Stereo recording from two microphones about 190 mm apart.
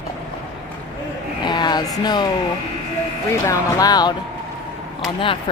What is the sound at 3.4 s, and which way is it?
Speech, 20° left (ahead or behind).